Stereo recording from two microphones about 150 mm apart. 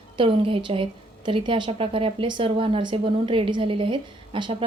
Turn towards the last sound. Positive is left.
turn(degrees=-35)  # may be behind; listen again after turning